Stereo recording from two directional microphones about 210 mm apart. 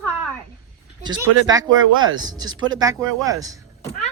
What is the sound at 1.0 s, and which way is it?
Speech, 20° right (ahead or behind).